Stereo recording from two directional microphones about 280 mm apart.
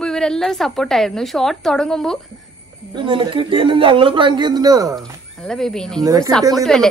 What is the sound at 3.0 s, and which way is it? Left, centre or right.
Speech, centre.